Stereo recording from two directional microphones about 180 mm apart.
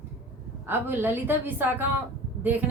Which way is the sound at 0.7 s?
10° right (ahead or behind).